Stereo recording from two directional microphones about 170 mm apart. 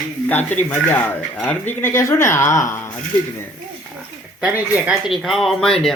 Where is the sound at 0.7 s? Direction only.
10° left (ahead or behind).